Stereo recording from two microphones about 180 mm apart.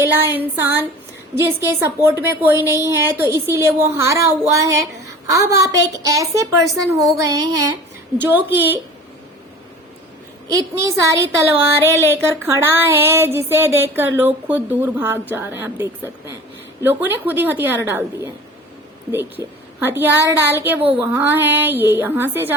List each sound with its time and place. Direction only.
0.0 s a woman's voice: 15° right (ahead or behind)
10.5 s a woman's voice: 15° right (ahead or behind)